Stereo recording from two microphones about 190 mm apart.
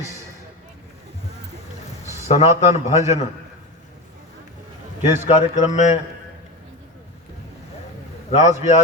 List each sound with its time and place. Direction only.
2.2 s a man's voice: 35° left (ahead or behind)
5.2 s a man's voice: 35° left (ahead or behind)
8.3 s a man's voice: 35° left (ahead or behind)